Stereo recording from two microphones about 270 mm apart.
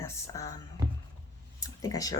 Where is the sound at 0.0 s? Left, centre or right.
Centre.